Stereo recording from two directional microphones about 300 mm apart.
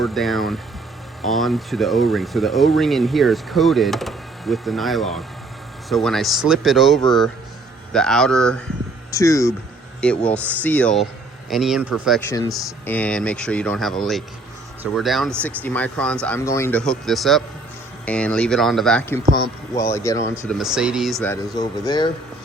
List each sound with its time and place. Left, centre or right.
0.0 s speech: centre
21.5 s speech: centre